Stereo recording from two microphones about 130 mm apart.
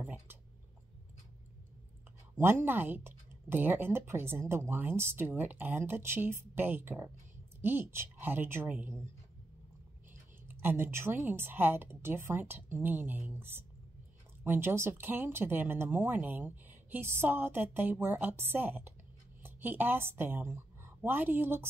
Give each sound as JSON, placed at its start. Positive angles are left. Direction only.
{"t": 0.0, "sound": "a sound", "side_deg": -15}
{"t": 2.3, "sound": "speech", "side_deg": -15}
{"t": 10.5, "sound": "a woman's voice", "side_deg": -15}